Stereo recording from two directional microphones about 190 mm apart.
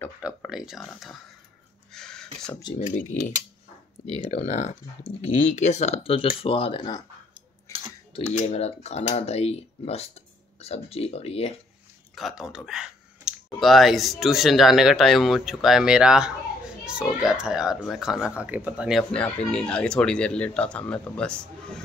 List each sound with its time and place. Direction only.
0.2 s speech: centre (ahead or behind)
1.9 s a sound: 5° left (ahead or behind)
2.8 s speech: 40° left (ahead or behind); by 7.0 s 25° left (ahead or behind)
7.7 s a sound: 15° left (ahead or behind)
8.1 s speech: 30° left (ahead or behind)
12.2 s speech: centre (ahead or behind)